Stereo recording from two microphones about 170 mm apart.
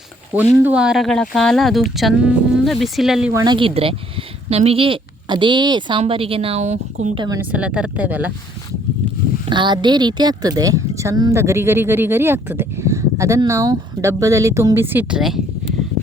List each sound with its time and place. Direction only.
0.6 s speech: 5° right (ahead or behind)
3.3 s a woman's voice: 25° right (ahead or behind); by 7.1 s 40° right (ahead or behind)
7.2 s speech: 20° right (ahead or behind)
7.5 s speech: 5° right (ahead or behind)
9.5 s speech: 25° right (ahead or behind); by 15.4 s 5° right (ahead or behind)